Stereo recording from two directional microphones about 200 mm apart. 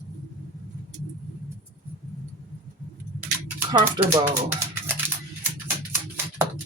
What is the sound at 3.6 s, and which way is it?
Speech, 20° right (ahead or behind).